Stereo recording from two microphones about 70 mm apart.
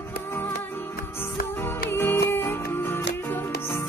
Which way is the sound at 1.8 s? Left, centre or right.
Left.